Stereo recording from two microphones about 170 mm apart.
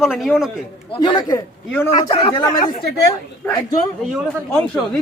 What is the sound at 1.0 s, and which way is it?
Speech, 25° left (ahead or behind).